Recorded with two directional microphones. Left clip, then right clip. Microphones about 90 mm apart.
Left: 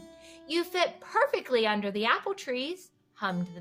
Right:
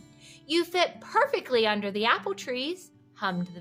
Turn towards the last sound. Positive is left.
turn(degrees=-35)  # may be behind; listen again after turning